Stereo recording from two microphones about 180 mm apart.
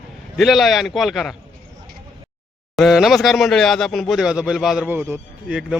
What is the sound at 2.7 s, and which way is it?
Speech, centre (ahead or behind).